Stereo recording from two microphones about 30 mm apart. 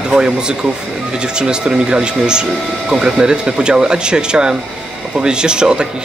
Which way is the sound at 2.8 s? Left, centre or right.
Centre.